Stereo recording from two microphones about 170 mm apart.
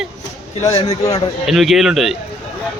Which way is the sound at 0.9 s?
20° left (ahead or behind).